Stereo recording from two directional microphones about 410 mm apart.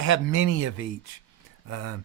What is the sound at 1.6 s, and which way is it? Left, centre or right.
Speech, right.